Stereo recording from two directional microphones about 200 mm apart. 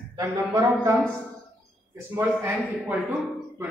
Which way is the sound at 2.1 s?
10° right (ahead or behind).